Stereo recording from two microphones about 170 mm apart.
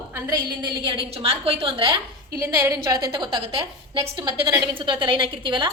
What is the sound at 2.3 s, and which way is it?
Speech, 15° right (ahead or behind).